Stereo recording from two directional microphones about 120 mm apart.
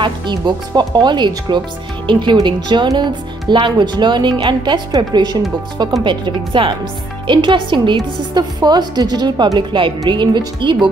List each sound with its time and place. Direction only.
0.0 s a woman's voice: 40° right (ahead or behind)